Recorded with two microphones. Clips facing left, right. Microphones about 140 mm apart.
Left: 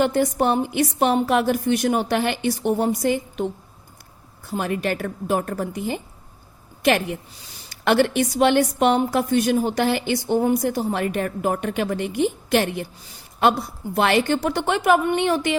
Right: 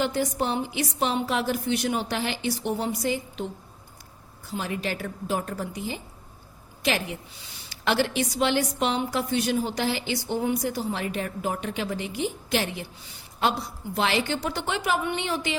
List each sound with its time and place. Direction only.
0.0 s a woman's voice: 55° left (ahead or behind)